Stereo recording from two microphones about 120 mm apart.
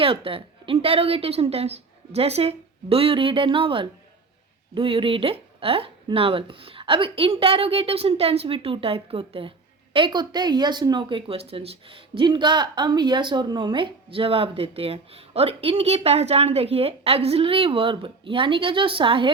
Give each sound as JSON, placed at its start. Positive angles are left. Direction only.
{"t": 0.0, "sound": "a woman's voice", "side_deg": -50}
{"t": 11.3, "sound": "a woman's voice", "side_deg": -55}